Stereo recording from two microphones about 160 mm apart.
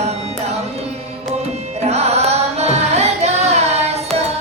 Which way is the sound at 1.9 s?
45° right (ahead or behind).